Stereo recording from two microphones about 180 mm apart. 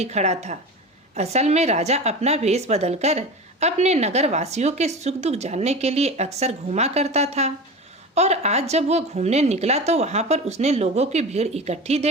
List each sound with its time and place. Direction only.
0.0 s a woman's voice: 40° right (ahead or behind)